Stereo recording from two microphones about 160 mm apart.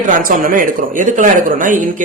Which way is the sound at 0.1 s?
60° right (ahead or behind).